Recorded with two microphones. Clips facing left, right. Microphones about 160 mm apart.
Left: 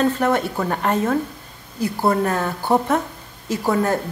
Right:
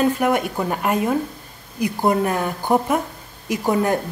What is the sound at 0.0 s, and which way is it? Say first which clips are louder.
A woman's voice: even; 10° right (ahead or behind).